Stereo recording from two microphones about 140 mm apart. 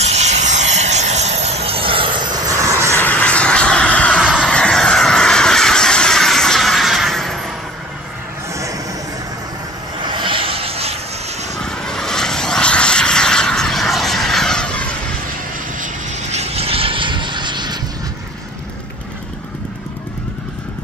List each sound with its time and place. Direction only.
0.0 s vehicle: 50° right (ahead or behind); by 3.0 s 20° right (ahead or behind)
3.0 s vehicle: 10° left (ahead or behind)
4.2 s a sound: 5° right (ahead or behind)
10.0 s a sound: 35° right (ahead or behind)
11.6 s vehicle: 5° left (ahead or behind)
15.8 s vehicle: 50° right (ahead or behind); by 17.7 s 35° right (ahead or behind)